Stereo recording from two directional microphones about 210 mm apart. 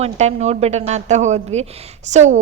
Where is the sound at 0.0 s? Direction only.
30° right (ahead or behind).